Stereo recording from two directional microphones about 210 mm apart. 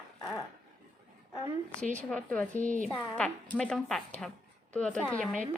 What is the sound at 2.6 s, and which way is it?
Speech, 35° right (ahead or behind).